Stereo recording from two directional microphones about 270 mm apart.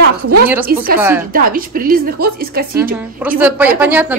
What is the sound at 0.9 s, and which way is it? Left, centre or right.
Speech, centre.